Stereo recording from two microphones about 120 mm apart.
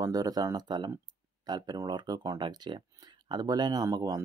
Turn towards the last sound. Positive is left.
turn(degrees=-25)  # may be behind; listen again after turning